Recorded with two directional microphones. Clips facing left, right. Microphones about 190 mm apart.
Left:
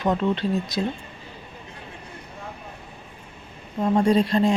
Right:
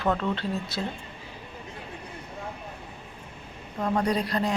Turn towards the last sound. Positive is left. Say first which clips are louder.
# left 7 dB
turn(degrees=25)  # may be behind; listen again after turning